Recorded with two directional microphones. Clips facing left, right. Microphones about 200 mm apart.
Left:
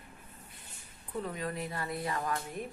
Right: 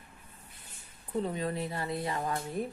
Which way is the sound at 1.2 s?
25° right (ahead or behind).